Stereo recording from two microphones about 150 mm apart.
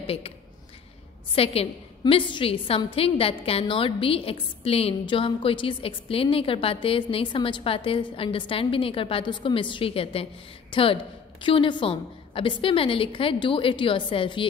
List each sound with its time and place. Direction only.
0.0 s speech: 40° left (ahead or behind)
1.3 s a woman's voice: 40° left (ahead or behind)